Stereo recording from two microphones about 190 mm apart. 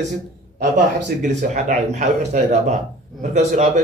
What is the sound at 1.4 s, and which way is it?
A man's voice, 40° right (ahead or behind).